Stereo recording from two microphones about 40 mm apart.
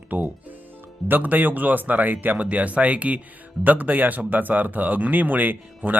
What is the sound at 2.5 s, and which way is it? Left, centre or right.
Speech, right.